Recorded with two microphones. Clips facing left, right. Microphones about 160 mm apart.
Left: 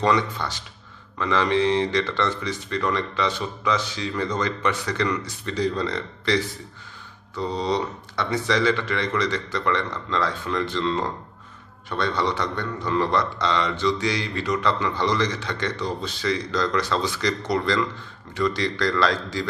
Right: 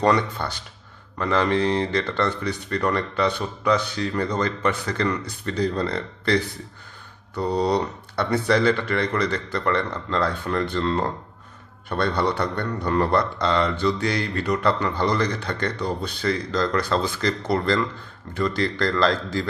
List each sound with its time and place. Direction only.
0.0 s a man's voice: 55° right (ahead or behind)